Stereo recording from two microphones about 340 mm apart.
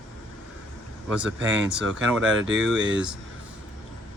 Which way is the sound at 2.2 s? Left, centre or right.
Right.